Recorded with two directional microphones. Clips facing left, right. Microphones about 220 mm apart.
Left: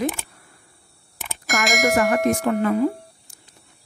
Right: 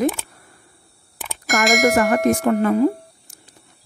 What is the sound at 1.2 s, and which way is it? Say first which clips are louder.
Speech: right 4 dB; centre (ahead or behind).